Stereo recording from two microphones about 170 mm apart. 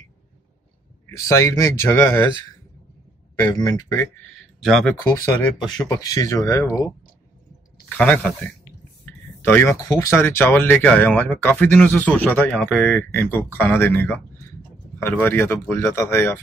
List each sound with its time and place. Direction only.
1.1 s speech: 20° left (ahead or behind)
3.3 s speech: 25° left (ahead or behind)
4.6 s speech: centre (ahead or behind)
5.0 s speech: 20° left (ahead or behind)
8.0 s speech: 5° left (ahead or behind)